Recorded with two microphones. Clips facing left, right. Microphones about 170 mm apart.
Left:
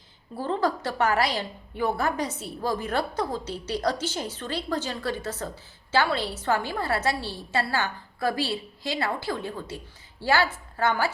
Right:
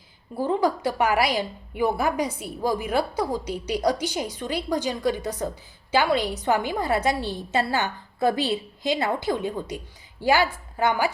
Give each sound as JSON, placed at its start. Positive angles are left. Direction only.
{"t": 0.3, "sound": "a woman's voice", "side_deg": -15}